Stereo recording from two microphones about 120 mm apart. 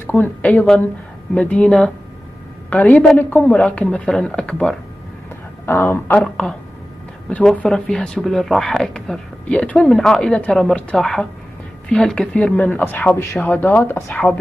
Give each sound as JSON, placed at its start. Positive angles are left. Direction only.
{"t": 0.0, "sound": "speech", "side_deg": 15}
{"t": 5.7, "sound": "speech", "side_deg": 20}
{"t": 6.2, "sound": "speech", "side_deg": 5}